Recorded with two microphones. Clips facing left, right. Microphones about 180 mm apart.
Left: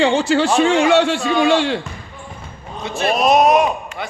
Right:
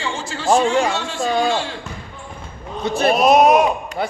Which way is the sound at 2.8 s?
35° right (ahead or behind).